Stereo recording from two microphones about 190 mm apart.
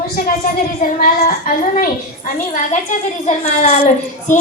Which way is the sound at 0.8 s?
50° left (ahead or behind).